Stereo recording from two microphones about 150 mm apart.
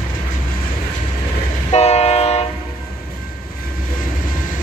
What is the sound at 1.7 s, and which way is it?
Train, 45° left (ahead or behind).